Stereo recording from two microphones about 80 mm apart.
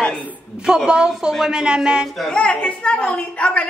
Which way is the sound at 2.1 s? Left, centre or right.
Centre.